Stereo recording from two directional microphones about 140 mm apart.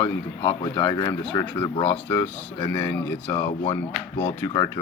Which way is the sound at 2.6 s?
15° left (ahead or behind).